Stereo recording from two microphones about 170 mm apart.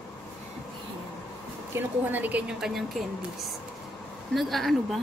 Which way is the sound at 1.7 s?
10° right (ahead or behind).